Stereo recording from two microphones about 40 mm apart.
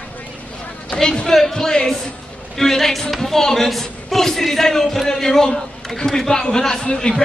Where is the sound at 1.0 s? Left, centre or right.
Left.